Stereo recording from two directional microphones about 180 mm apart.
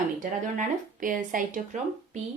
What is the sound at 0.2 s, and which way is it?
Speech, 45° right (ahead or behind).